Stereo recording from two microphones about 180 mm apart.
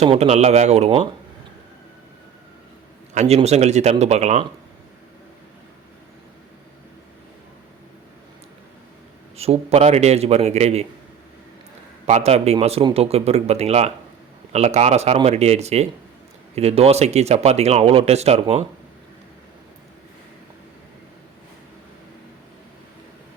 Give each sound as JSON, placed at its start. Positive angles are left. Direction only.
{"t": 0.0, "sound": "speech", "side_deg": -35}
{"t": 3.2, "sound": "speech", "side_deg": -35}
{"t": 9.4, "sound": "speech", "side_deg": -35}
{"t": 12.0, "sound": "speech", "side_deg": -35}